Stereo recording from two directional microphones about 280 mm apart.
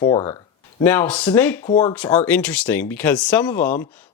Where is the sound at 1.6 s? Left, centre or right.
Left.